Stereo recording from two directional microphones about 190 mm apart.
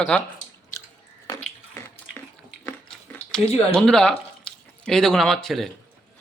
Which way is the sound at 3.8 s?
5° left (ahead or behind).